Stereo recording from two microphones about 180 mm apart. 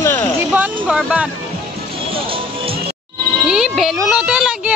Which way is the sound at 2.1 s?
30° right (ahead or behind).